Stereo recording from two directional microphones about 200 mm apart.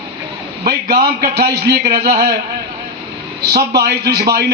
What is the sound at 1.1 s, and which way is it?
Speech, 55° right (ahead or behind).